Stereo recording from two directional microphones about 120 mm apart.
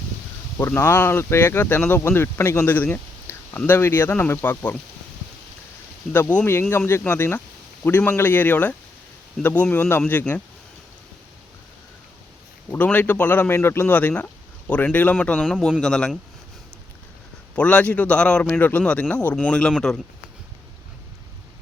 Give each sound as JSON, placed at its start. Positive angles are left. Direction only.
{"t": 0.6, "sound": "speech", "side_deg": 20}
{"t": 6.1, "sound": "speech", "side_deg": 15}
{"t": 12.7, "sound": "speech", "side_deg": 15}
{"t": 17.5, "sound": "speech", "side_deg": 10}